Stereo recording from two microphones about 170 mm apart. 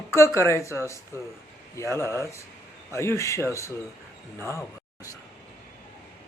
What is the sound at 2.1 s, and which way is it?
Speech, 15° left (ahead or behind).